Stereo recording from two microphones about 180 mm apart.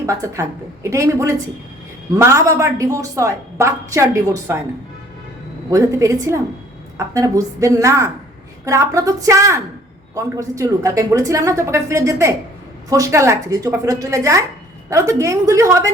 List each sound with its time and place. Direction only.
0.0 s a woman's voice: 15° right (ahead or behind)
5.7 s a woman's voice: 20° right (ahead or behind)